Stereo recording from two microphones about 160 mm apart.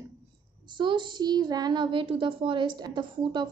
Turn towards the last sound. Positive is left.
turn(degrees=-30)  # may be behind; listen again after turning